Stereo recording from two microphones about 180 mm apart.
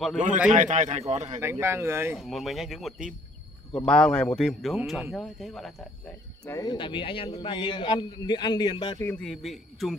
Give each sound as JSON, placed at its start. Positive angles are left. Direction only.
{"t": 0.5, "sound": "speech", "side_deg": -40}
{"t": 1.4, "sound": "speech", "side_deg": -15}
{"t": 2.1, "sound": "a man's voice", "side_deg": 0}
{"t": 6.4, "sound": "a man's voice", "side_deg": 20}
{"t": 9.0, "sound": "a man's voice", "side_deg": 5}